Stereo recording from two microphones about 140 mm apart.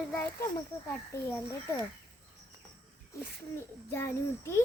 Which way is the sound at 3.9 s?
20° left (ahead or behind).